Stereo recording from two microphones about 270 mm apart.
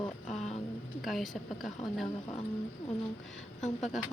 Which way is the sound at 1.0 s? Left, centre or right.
Centre.